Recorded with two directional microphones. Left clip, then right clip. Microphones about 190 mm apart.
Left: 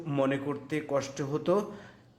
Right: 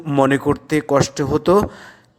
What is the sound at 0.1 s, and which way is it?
A man's voice, 45° right (ahead or behind).